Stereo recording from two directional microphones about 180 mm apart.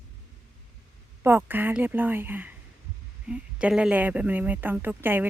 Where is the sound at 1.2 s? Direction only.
10° right (ahead or behind).